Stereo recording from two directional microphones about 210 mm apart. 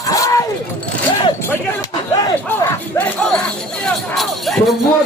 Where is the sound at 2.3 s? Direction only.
10° left (ahead or behind).